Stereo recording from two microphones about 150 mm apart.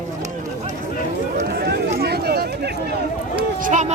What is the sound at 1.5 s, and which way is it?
Chatter, 90° right.